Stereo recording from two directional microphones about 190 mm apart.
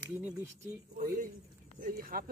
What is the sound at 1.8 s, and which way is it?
Speech, 50° right (ahead or behind).